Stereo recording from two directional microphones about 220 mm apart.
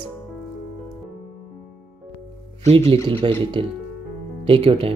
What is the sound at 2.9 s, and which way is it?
Speech, 25° right (ahead or behind).